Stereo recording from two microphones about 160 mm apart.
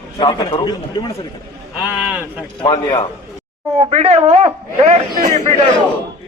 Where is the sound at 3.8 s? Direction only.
40° right (ahead or behind).